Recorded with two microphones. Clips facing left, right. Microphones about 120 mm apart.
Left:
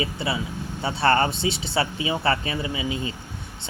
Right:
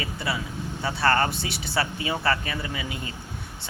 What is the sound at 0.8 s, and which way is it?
Speech, 25° left (ahead or behind).